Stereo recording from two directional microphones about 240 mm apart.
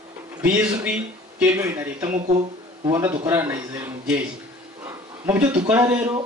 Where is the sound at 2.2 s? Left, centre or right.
Right.